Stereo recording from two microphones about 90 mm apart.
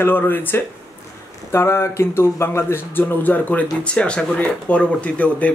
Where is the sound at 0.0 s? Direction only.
20° left (ahead or behind).